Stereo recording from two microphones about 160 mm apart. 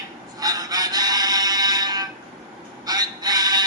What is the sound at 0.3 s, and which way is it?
Music, 25° right (ahead or behind).